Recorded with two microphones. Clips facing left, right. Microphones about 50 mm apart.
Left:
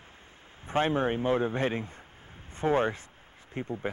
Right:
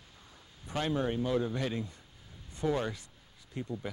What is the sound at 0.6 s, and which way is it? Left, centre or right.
Speech, left.